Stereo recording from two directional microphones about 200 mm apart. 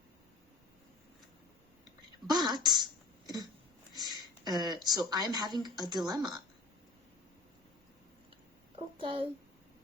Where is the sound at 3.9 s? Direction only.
20° right (ahead or behind).